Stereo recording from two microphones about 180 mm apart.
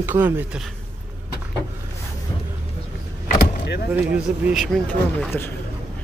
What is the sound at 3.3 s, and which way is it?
Vehicle, 60° left (ahead or behind).